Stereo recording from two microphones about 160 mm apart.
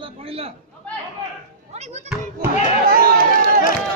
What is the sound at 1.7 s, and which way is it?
Children playing, 45° right (ahead or behind).